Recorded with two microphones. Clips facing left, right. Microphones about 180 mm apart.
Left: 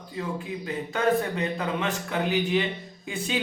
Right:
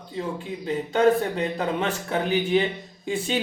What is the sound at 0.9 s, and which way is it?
Speech, 30° right (ahead or behind).